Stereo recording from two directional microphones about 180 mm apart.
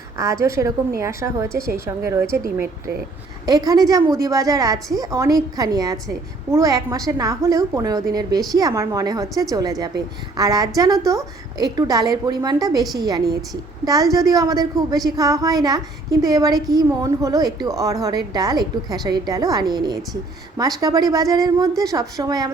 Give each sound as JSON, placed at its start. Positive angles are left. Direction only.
{"t": 0.2, "sound": "a woman's voice", "side_deg": -15}